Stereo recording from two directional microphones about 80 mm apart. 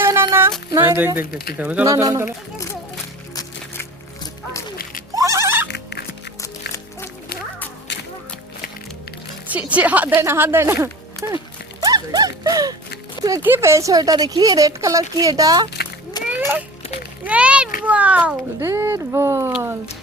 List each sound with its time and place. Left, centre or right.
0.0 s a sound: right
0.8 s speech: right
1.8 s speech: right
5.1 s music: right
9.5 s speech: centre
10.2 s speech: right
11.8 s clip-clop: right
13.4 s speech: right
13.9 s speech: right
14.7 s speech: right
16.2 s a sound: left
17.2 s a child's voice: centre
18.6 s speech: right